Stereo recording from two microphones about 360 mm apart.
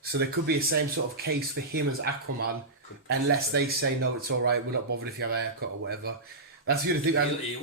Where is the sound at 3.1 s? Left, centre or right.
Right.